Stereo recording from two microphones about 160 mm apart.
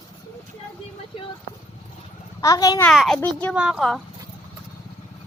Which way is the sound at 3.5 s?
5° right (ahead or behind).